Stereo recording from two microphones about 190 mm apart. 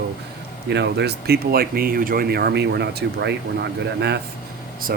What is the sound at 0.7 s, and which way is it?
Speech, 65° right (ahead or behind).